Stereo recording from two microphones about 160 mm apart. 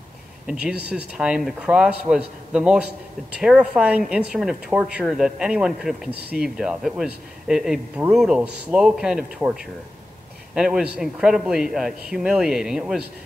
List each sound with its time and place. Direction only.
0.5 s a man's voice: 5° right (ahead or behind)
6.1 s speech: 90° right
6.4 s a man's voice: 5° right (ahead or behind)